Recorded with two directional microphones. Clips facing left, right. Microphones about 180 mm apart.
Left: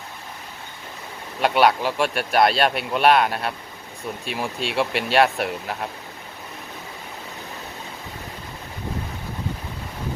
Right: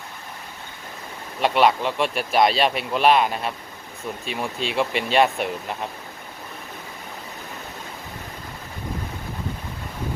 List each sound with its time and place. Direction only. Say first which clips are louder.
1.4 s speech: even; centre (ahead or behind)